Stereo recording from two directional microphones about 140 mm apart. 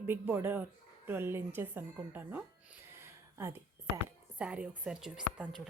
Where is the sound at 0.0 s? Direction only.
20° right (ahead or behind).